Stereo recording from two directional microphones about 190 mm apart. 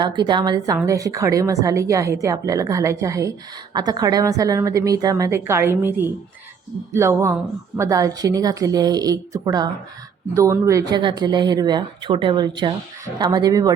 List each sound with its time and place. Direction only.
0.0 s a woman's voice: 25° right (ahead or behind)
6.9 s a woman's voice: 15° right (ahead or behind)